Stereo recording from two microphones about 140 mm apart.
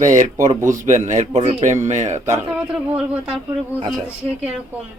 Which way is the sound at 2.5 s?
5° right (ahead or behind).